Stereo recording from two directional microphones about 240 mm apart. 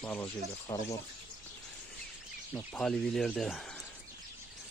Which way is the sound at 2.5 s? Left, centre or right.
Centre.